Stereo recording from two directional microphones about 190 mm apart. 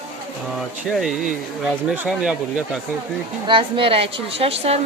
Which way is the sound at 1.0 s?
Centre (ahead or behind).